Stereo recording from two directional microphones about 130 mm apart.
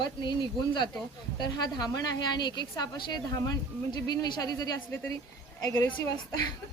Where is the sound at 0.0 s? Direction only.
35° left (ahead or behind).